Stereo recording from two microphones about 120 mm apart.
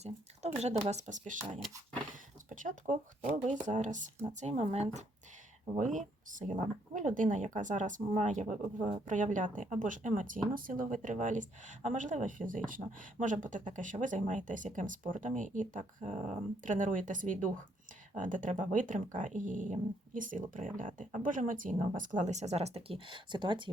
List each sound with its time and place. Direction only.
0.0 s speech: 65° right (ahead or behind)
0.9 s speech: 75° right (ahead or behind)
2.5 s speech: 90° right; by 5.0 s 60° right (ahead or behind)
5.7 s speech: 90° right; by 23.7 s 40° right (ahead or behind)